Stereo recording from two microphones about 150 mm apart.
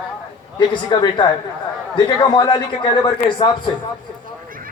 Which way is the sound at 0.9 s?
30° left (ahead or behind).